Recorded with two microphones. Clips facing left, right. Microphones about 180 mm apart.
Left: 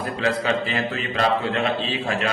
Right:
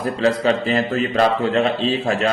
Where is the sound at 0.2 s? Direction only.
35° right (ahead or behind).